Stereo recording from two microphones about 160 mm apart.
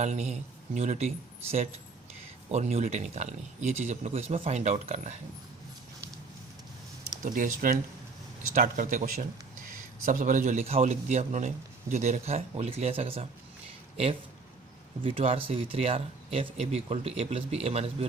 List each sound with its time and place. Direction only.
0.0 s a man's voice: 45° right (ahead or behind)
7.2 s a man's voice: 55° right (ahead or behind); by 17.9 s 40° right (ahead or behind)